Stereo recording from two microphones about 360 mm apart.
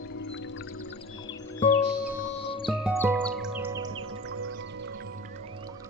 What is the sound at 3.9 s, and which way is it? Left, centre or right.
Music, right.